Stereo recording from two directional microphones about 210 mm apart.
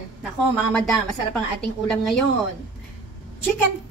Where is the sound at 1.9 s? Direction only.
Centre (ahead or behind).